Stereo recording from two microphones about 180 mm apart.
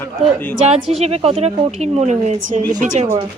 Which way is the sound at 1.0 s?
35° right (ahead or behind).